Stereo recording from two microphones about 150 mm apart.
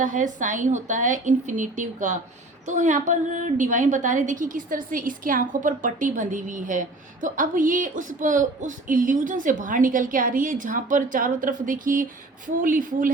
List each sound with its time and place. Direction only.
0.0 s a woman's voice: 55° right (ahead or behind)